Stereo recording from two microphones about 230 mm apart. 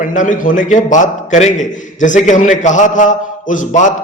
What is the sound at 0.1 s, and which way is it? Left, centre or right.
A man's voice, left.